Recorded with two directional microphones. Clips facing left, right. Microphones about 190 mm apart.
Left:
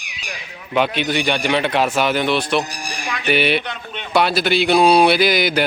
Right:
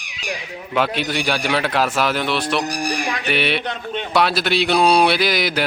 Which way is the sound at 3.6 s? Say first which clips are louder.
Right 5 dB; 35° right (ahead or behind).